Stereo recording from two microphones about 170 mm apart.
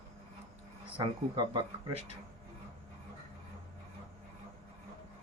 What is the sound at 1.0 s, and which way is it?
Speech, 25° right (ahead or behind).